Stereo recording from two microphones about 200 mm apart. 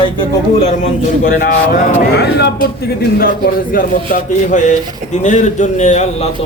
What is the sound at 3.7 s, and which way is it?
Speech, 40° left (ahead or behind).